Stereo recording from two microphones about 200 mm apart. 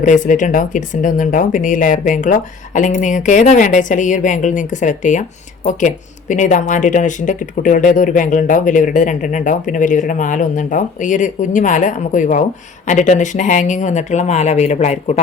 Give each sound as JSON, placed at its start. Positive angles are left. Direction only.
{"t": 0.0, "sound": "speech", "side_deg": 40}